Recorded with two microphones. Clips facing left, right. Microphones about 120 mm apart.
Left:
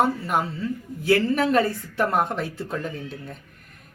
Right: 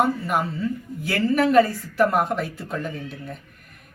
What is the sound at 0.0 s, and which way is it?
A man's voice, 30° left (ahead or behind).